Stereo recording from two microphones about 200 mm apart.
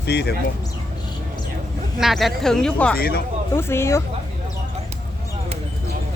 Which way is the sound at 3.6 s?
10° left (ahead or behind).